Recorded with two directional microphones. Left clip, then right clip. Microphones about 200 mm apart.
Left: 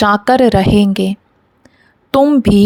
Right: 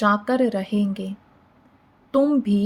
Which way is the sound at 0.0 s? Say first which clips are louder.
Left 10 dB; 55° left (ahead or behind).